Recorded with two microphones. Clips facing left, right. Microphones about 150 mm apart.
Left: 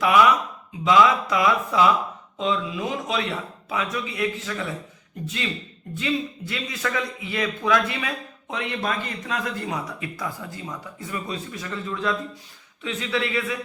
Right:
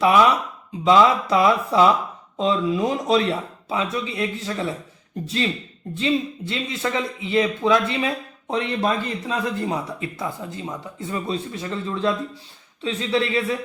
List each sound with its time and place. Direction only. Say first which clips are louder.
0.9 s a man's voice: right 2 dB; 30° right (ahead or behind)